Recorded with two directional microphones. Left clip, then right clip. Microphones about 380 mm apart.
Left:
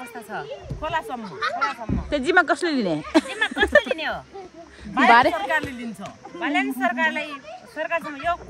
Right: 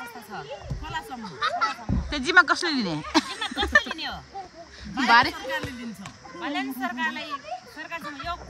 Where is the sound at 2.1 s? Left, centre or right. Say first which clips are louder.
Even; centre.